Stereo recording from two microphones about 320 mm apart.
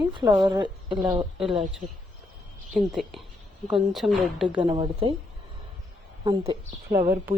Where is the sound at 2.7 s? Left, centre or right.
Centre.